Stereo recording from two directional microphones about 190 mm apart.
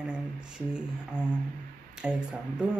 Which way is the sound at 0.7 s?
5° right (ahead or behind).